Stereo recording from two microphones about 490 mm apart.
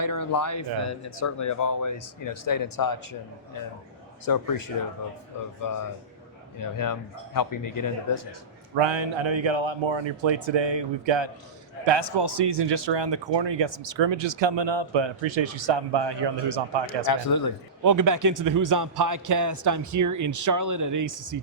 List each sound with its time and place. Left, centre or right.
0.0 s speech: left
6.6 s speech: left
8.7 s speech: right
17.1 s speech: left
17.8 s a man's voice: right